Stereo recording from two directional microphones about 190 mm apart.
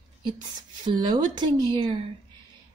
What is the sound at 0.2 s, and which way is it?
Speech, 25° right (ahead or behind).